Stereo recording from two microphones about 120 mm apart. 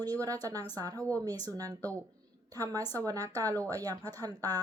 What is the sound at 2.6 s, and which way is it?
A woman's voice, 30° right (ahead or behind).